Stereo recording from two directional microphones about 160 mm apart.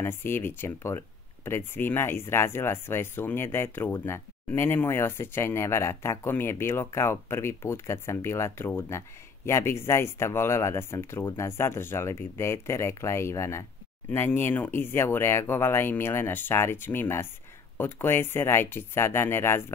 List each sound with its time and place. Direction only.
0.0 s speech: 15° left (ahead or behind)